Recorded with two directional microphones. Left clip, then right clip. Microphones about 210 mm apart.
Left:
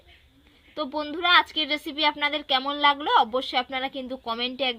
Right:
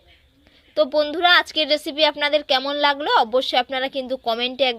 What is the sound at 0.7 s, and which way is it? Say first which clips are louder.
A woman's voice: right 11 dB; 40° right (ahead or behind).